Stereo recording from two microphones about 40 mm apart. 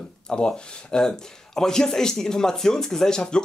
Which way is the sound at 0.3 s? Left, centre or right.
Centre.